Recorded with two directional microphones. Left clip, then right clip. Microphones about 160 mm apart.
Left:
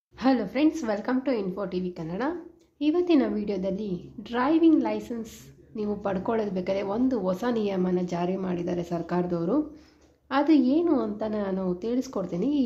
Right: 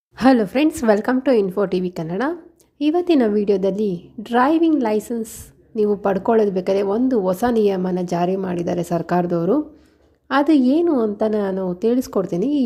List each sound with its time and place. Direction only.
0.2 s a woman's voice: 45° right (ahead or behind)